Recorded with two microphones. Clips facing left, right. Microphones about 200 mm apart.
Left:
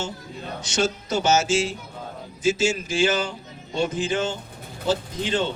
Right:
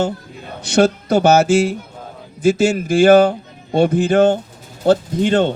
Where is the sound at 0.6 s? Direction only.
60° right (ahead or behind).